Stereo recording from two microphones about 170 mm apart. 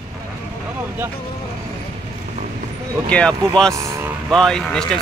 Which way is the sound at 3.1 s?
5° left (ahead or behind).